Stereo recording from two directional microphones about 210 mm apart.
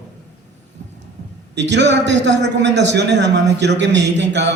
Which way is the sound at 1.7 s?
55° right (ahead or behind).